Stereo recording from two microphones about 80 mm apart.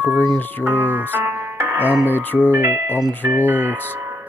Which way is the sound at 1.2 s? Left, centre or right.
Right.